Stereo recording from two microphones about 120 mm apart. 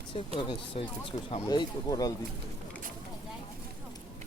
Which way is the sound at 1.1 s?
80° left.